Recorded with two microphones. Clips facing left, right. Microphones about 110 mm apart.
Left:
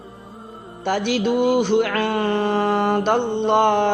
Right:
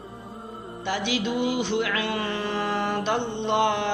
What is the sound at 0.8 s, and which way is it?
Mantra, 50° left (ahead or behind).